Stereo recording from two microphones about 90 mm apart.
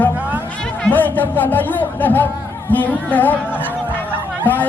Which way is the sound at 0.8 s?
20° left (ahead or behind).